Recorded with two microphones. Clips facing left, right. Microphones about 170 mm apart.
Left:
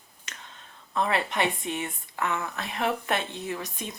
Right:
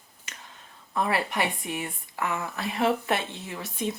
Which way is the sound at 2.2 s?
15° right (ahead or behind).